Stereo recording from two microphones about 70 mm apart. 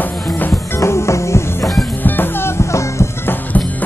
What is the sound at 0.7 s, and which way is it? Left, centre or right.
Music, left.